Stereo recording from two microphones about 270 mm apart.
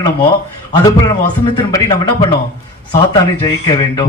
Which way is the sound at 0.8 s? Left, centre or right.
Centre.